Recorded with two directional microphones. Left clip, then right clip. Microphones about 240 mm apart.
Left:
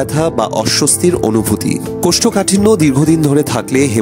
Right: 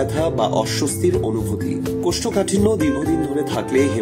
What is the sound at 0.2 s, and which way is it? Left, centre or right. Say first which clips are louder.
Speech: left 5 dB; left.